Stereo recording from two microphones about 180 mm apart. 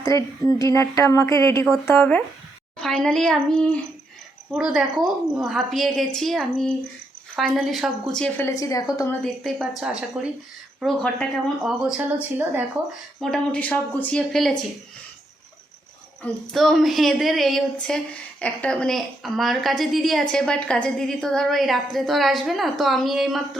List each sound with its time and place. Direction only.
0.0 s a woman's voice: 20° left (ahead or behind)
9.2 s speech: centre (ahead or behind)
13.1 s speech: centre (ahead or behind)
16.2 s speech: centre (ahead or behind)